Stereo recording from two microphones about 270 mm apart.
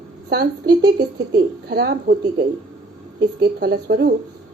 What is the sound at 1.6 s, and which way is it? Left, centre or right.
Speech, right.